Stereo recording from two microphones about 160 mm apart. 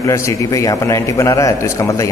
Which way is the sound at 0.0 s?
20° left (ahead or behind).